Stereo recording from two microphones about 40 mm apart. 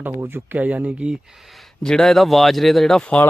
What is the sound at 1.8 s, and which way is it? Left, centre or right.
Speech, centre.